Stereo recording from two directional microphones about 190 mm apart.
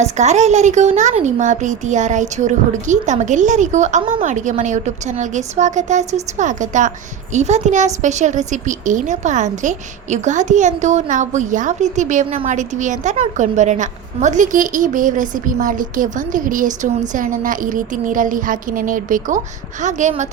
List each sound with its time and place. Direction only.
0.0 s a woman's voice: 40° right (ahead or behind)